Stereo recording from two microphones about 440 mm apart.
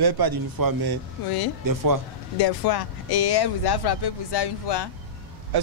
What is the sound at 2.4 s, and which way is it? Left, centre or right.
Speech, left.